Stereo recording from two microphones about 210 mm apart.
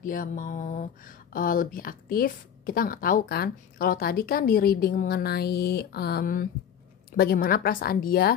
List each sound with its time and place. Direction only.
0.0 s speech: 40° left (ahead or behind)